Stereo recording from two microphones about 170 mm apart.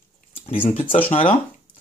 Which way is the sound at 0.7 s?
50° left (ahead or behind).